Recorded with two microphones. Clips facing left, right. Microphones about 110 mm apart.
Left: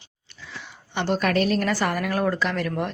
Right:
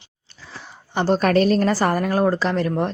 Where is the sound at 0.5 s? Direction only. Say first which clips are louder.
Right 5 dB; 35° right (ahead or behind).